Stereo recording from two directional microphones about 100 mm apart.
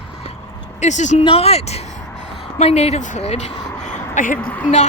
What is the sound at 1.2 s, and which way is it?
Speech, 80° left.